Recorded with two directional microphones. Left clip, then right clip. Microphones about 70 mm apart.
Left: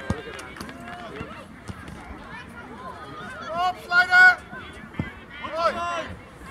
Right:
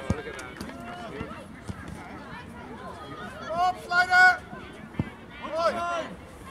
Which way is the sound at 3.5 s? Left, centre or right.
Left.